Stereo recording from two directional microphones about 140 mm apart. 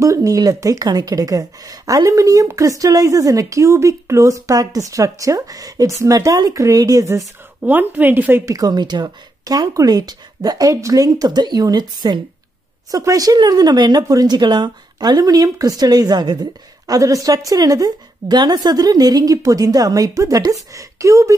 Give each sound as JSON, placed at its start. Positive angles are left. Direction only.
{"t": 0.0, "sound": "speech", "side_deg": -25}
{"t": 7.6, "sound": "speech", "side_deg": -15}
{"t": 8.5, "sound": "speech", "side_deg": -30}